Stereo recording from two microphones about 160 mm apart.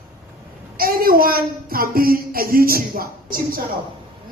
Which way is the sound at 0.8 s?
65° right (ahead or behind).